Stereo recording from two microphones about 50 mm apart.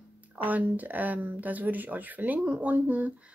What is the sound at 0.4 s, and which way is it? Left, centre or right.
Speech, right.